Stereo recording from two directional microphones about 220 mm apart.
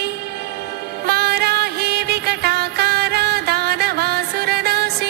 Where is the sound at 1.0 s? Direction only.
45° right (ahead or behind).